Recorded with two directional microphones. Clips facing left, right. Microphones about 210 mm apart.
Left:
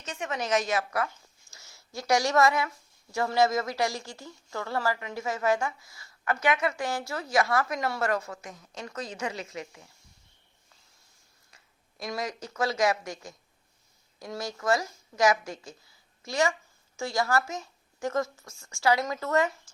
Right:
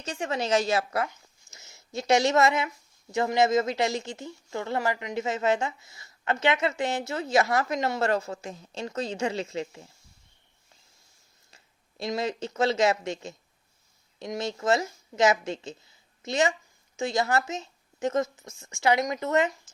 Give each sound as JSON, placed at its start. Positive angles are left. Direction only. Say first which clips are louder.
{"t": 0.0, "sound": "speech", "louder": "right 3 dB", "side_deg": -30}
{"t": 11.5, "sound": "speech", "louder": "right 5 dB", "side_deg": -25}